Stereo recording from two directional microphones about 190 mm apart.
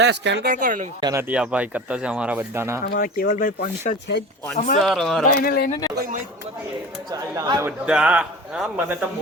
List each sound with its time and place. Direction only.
0.0 s speech: 65° right (ahead or behind)
0.4 s speech: 45° right (ahead or behind)
1.3 s speech: 5° right (ahead or behind)
2.8 s speech: 50° left (ahead or behind)
3.3 s speech: 40° left (ahead or behind)
4.8 s a man's voice: centre (ahead or behind)
5.2 s speech: 50° left (ahead or behind)
7.1 s speech: 20° right (ahead or behind)
7.9 s a man's voice: 5° right (ahead or behind)